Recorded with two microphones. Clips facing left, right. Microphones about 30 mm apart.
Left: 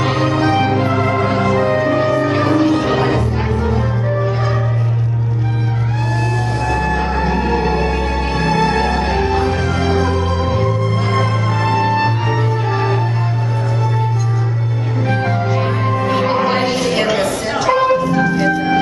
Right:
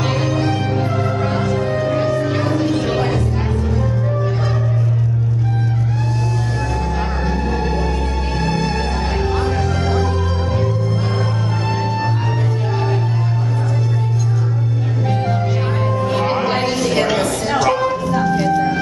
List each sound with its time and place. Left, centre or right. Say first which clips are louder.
0.4 s music: left 5 dB; left
7.3 s music: left 4 dB; left
11.8 s music: left 7 dB; left
16.1 s music: left 3 dB; centre
16.6 s a sound: left 1 dB; centre
17.9 s music: left 2 dB; centre